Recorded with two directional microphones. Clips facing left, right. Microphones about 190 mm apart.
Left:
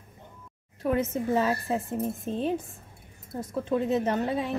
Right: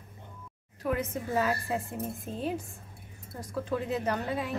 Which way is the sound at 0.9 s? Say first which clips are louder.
Left 5 dB; 25° left (ahead or behind).